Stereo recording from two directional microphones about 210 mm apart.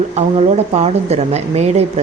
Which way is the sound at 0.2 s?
30° right (ahead or behind).